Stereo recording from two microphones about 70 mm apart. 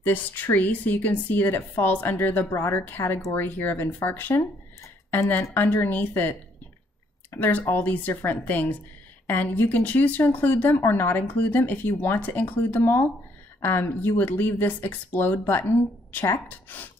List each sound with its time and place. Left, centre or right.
0.0 s speech: left